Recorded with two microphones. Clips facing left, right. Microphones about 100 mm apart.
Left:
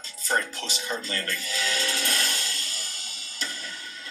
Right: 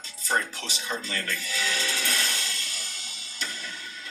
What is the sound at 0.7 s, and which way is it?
Speech, 45° left (ahead or behind).